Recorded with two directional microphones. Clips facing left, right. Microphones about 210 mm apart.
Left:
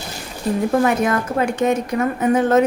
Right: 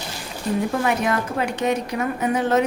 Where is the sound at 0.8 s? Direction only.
50° left (ahead or behind).